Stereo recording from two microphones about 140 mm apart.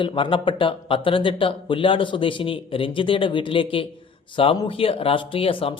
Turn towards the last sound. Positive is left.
turn(degrees=40)  # may be behind; listen again after turning